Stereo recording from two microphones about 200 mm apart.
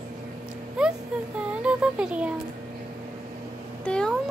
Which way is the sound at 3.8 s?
5° left (ahead or behind).